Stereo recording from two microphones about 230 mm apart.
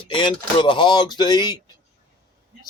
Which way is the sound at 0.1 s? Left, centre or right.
Left.